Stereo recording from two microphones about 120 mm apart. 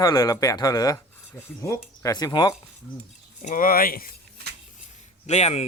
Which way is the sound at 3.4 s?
90° left.